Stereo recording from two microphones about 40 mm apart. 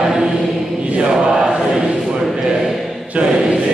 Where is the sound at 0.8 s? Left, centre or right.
Right.